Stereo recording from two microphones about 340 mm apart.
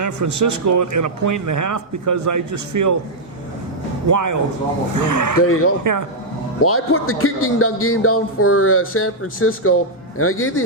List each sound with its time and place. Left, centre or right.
0.0 s a man's voice: right
4.1 s a man's voice: right
5.4 s a man's voice: left
5.8 s a man's voice: right
6.6 s a man's voice: left